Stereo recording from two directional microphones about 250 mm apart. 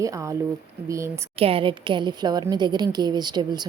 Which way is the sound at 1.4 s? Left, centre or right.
Right.